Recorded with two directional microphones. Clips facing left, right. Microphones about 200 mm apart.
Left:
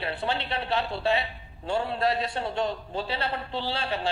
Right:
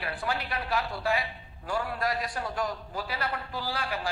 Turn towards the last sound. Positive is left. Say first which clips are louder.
# left 3 dB
turn(degrees=25)  # may be behind; listen again after turning